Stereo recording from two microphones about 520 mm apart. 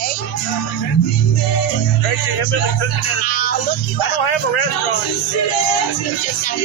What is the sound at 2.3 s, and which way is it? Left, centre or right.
Speech, left.